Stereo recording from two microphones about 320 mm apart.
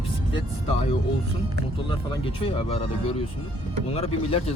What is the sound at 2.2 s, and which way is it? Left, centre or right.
Speech, centre.